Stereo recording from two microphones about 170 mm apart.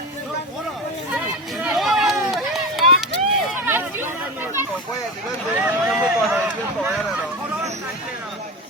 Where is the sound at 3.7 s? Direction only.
15° right (ahead or behind).